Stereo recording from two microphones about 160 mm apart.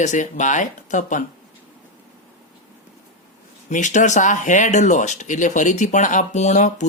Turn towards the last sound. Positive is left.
turn(degrees=45)  # may be behind; listen again after turning